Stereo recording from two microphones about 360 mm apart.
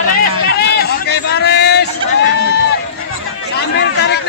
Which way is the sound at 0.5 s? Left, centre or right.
Left.